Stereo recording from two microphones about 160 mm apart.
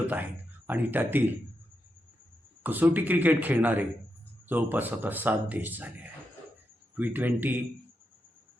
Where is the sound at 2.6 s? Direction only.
10° right (ahead or behind).